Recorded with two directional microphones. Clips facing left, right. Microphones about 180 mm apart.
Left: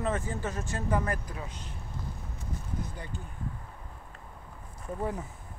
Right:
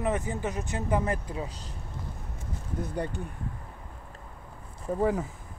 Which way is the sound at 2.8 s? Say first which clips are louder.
Right 8 dB; 65° right (ahead or behind).